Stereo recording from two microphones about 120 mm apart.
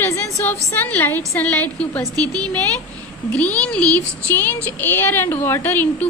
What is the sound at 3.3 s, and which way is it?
Speech, 10° left (ahead or behind).